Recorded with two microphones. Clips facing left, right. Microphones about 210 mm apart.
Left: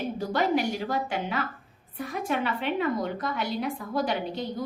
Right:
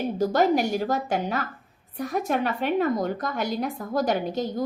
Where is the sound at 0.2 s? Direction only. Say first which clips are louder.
Right 5 dB; 40° right (ahead or behind).